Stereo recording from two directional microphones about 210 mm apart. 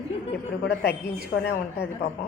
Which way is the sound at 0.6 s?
55° left (ahead or behind).